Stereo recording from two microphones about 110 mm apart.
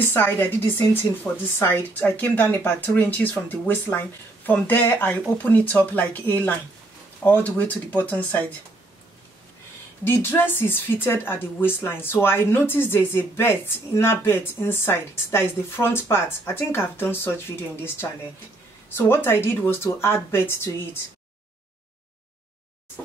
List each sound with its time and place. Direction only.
0.0 s speech: 20° left (ahead or behind)
10.0 s speech: 20° left (ahead or behind)
18.9 s speech: 20° left (ahead or behind)